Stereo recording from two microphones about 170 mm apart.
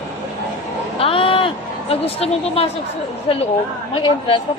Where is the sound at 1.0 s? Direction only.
30° left (ahead or behind).